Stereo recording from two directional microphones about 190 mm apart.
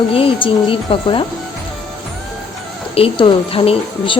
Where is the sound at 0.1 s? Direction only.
30° left (ahead or behind).